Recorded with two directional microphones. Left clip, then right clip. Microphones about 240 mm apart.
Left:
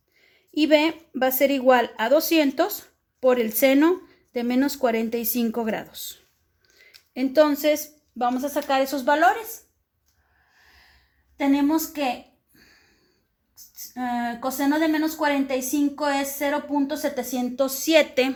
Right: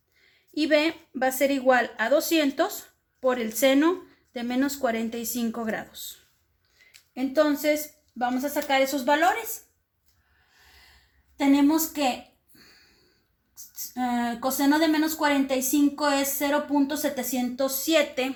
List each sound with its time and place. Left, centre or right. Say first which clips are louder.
0.2 s speech: left 4 dB; left
7.1 s a woman's voice: left 4 dB; left
11.3 s a woman's voice: even; centre
13.9 s a woman's voice: left 1 dB; centre
17.6 s a woman's voice: left 4 dB; left